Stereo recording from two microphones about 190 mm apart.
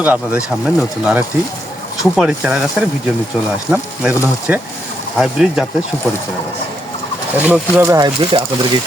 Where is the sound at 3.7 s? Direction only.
5° right (ahead or behind).